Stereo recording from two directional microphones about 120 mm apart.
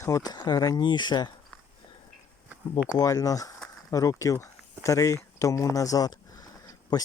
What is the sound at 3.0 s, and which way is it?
Speech, 30° left (ahead or behind).